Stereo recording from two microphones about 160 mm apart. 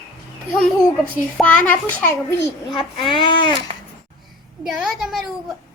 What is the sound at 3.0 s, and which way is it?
Speech, 30° left (ahead or behind).